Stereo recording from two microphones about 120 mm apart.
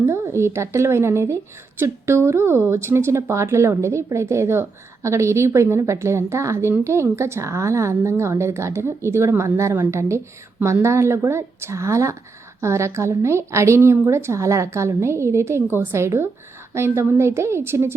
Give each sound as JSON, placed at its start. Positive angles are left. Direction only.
{"t": 0.0, "sound": "speech", "side_deg": -20}